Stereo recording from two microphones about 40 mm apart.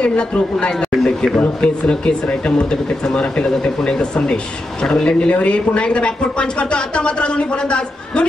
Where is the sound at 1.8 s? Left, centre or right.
Left.